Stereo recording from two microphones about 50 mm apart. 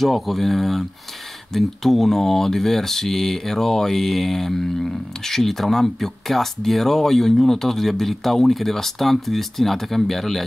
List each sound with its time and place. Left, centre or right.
0.0 s speech: centre